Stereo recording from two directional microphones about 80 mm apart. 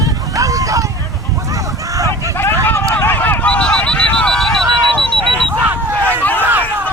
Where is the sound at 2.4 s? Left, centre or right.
Left.